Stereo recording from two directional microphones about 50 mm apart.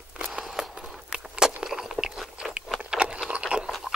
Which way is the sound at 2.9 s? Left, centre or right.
Centre.